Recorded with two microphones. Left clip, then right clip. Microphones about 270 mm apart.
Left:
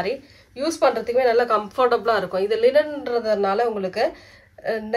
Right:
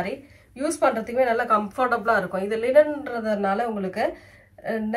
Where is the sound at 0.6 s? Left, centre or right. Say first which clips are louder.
Left 2 dB; left.